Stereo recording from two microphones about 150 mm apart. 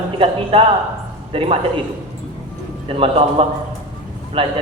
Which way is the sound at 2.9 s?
40° right (ahead or behind).